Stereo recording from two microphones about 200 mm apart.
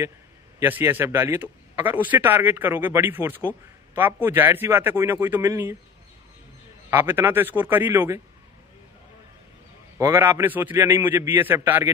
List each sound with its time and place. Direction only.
0.6 s speech: 10° right (ahead or behind)
6.9 s speech: 10° right (ahead or behind)
9.9 s speech: 15° right (ahead or behind)